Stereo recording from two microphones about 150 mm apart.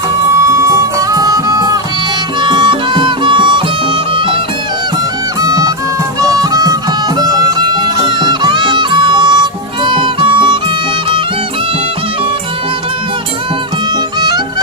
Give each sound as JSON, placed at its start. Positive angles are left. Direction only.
{"t": 0.4, "sound": "music", "side_deg": -20}
{"t": 5.4, "sound": "music", "side_deg": -25}